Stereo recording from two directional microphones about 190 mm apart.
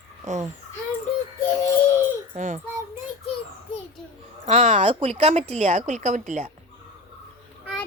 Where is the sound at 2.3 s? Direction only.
40° right (ahead or behind).